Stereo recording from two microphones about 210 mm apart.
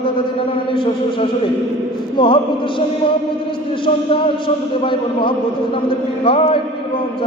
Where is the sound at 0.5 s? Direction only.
25° left (ahead or behind).